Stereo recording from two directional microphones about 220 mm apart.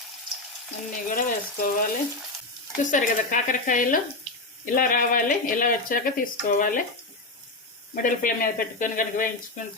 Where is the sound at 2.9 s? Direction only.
35° left (ahead or behind).